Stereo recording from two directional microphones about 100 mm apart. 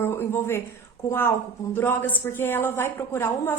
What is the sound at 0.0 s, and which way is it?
A woman's voice, 25° left (ahead or behind).